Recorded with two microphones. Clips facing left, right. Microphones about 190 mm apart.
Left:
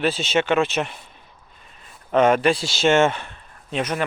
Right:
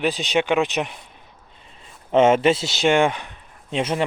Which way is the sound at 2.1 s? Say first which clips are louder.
Right 1 dB; 25° right (ahead or behind).